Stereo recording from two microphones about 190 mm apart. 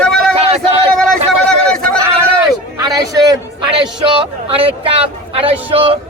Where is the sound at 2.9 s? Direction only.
20° right (ahead or behind).